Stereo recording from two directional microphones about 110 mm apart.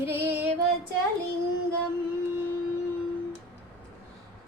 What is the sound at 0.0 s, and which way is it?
Female singing, 20° right (ahead or behind).